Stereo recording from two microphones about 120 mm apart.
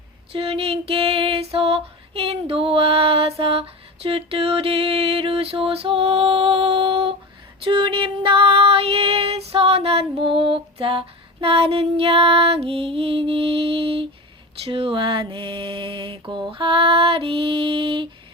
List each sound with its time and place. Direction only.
0.3 s music: 55° right (ahead or behind)
7.6 s female singing: 45° right (ahead or behind)
14.6 s music: 55° right (ahead or behind)